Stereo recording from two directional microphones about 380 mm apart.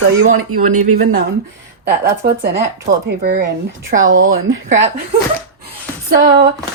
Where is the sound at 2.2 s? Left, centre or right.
Right.